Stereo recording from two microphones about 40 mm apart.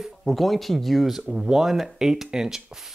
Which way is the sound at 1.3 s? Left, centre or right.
Centre.